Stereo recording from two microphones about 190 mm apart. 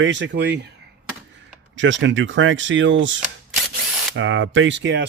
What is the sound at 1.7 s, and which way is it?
Speech, 75° right (ahead or behind).